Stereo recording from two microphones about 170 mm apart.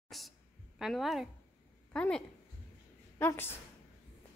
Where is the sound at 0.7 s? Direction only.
Centre (ahead or behind).